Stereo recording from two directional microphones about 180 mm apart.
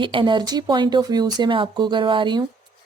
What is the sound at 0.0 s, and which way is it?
Speech, 30° right (ahead or behind).